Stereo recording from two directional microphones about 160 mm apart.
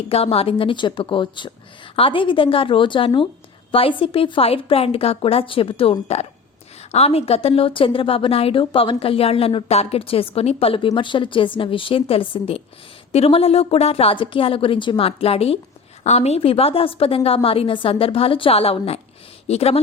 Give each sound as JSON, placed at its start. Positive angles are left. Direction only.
{"t": 0.1, "sound": "speech", "side_deg": 40}